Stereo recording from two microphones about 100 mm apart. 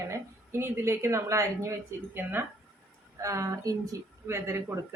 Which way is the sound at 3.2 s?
30° right (ahead or behind).